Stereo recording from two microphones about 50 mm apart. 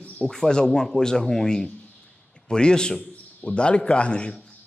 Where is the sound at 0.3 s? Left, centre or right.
Centre.